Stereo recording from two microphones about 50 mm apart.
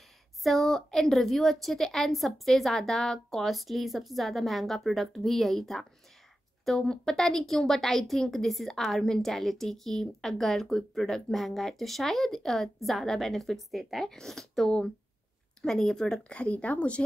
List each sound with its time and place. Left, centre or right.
0.4 s a woman's voice: centre; by 17.0 s left